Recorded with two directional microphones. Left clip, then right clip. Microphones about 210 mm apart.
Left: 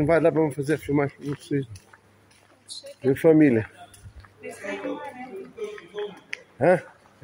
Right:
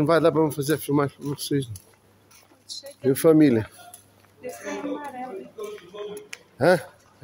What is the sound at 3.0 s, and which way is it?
Speech, centre (ahead or behind).